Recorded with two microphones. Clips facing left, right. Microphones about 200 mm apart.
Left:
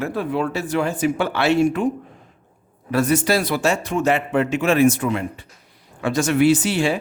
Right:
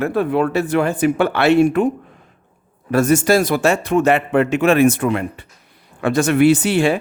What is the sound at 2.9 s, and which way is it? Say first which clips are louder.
Speech: right 4 dB; 45° right (ahead or behind).